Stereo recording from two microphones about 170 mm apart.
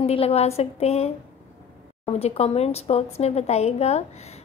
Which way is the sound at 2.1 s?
35° left (ahead or behind).